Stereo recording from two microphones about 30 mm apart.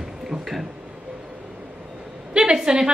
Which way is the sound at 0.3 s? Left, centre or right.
Centre.